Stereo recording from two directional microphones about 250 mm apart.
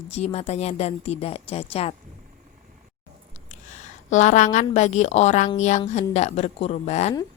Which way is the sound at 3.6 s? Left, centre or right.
Left.